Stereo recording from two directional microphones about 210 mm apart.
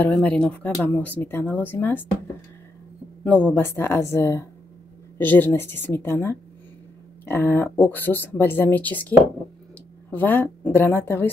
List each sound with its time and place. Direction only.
0.0 s speech: 5° left (ahead or behind)
3.3 s speech: 5° left (ahead or behind)
10.1 s speech: 10° left (ahead or behind)